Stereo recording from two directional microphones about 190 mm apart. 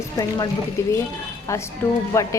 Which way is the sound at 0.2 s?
20° left (ahead or behind).